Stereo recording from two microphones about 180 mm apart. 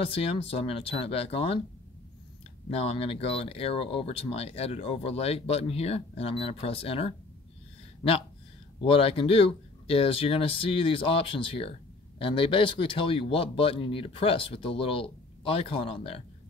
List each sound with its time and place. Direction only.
0.0 s speech: 30° left (ahead or behind)
2.7 s speech: 35° left (ahead or behind)
8.8 s speech: 30° left (ahead or behind)